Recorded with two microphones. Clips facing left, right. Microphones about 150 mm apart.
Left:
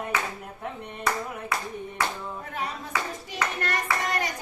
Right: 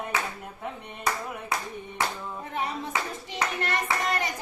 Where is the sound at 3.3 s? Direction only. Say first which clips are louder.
Even; 25° right (ahead or behind).